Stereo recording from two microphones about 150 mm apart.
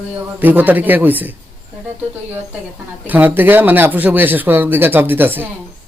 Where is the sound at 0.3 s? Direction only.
10° right (ahead or behind).